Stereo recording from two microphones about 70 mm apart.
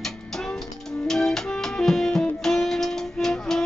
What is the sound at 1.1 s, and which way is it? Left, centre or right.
Music, centre.